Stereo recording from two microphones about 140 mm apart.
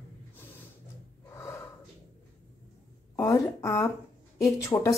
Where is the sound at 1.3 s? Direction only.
20° left (ahead or behind).